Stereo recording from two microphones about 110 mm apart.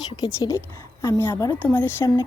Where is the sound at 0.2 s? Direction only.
30° left (ahead or behind).